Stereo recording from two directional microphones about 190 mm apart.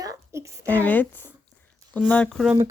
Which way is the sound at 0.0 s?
15° right (ahead or behind).